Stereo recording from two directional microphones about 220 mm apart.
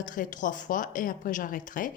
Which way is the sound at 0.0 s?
35° left (ahead or behind).